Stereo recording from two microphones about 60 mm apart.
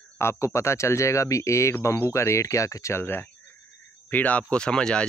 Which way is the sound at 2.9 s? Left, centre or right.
Left.